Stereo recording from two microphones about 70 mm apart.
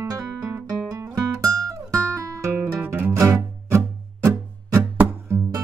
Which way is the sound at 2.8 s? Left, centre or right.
Right.